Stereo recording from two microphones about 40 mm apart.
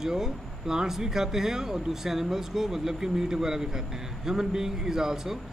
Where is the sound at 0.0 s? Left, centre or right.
Centre.